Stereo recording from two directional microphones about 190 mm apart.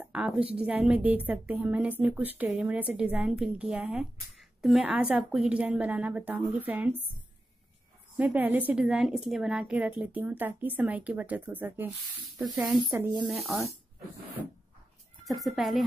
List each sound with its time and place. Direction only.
0.0 s a woman's voice: 5° right (ahead or behind)
8.2 s a woman's voice: 10° right (ahead or behind)
15.2 s speech: centre (ahead or behind)